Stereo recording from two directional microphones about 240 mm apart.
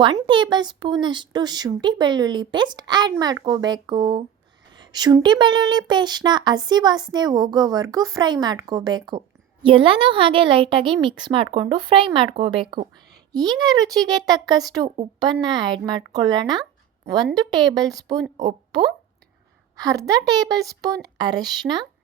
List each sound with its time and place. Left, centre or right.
0.0 s speech: centre